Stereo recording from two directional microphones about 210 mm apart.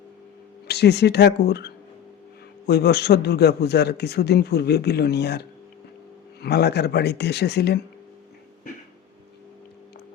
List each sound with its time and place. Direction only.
0.7 s a man's voice: 50° left (ahead or behind)